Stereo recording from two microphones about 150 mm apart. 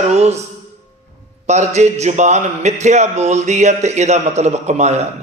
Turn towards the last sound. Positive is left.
turn(degrees=-45)  # may be behind; listen again after turning